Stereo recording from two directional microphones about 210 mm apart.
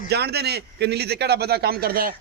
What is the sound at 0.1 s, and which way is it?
A man's voice, 50° right (ahead or behind).